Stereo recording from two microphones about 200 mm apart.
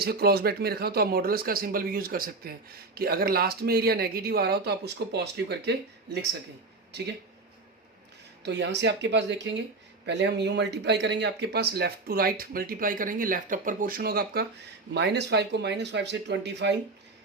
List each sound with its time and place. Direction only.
0.0 s speech: 50° right (ahead or behind)
8.4 s speech: 60° right (ahead or behind)